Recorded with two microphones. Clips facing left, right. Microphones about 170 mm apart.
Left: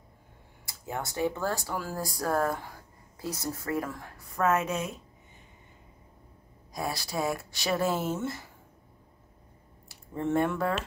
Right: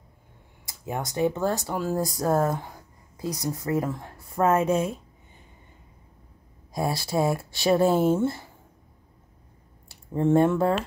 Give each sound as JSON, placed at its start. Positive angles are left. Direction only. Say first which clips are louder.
{"t": 0.7, "sound": "speech", "louder": "right 4 dB", "side_deg": -20}
{"t": 6.7, "sound": "speech", "louder": "right 7 dB", "side_deg": -25}
{"t": 9.8, "sound": "speech", "louder": "right 8 dB", "side_deg": -25}